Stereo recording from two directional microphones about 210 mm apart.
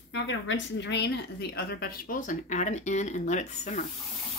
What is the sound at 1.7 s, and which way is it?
Speech, 45° left (ahead or behind).